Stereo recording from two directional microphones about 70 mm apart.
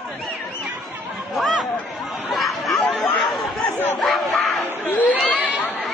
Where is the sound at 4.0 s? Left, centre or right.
Centre.